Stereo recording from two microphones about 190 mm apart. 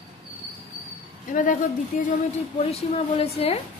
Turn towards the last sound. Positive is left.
turn(degrees=30)  # may be behind; listen again after turning